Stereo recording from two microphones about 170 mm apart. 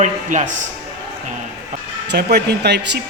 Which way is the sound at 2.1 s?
75° right (ahead or behind).